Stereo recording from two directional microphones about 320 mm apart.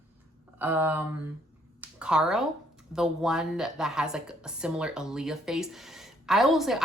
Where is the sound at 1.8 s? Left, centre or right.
Centre.